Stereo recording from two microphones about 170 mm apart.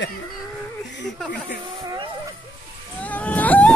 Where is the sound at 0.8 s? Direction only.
90° left.